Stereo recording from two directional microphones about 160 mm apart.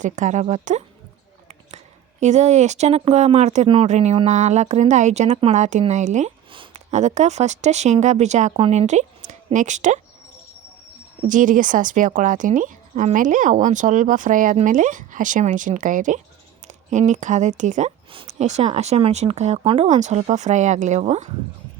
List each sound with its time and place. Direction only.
0.0 s speech: 50° right (ahead or behind)
2.2 s speech: 45° right (ahead or behind)
6.5 s a sound: 30° right (ahead or behind)
6.9 s speech: 45° right (ahead or behind)
11.3 s speech: 55° right (ahead or behind)